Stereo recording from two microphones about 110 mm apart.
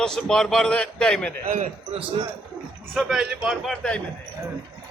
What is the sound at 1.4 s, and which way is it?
Speech, 75° right (ahead or behind).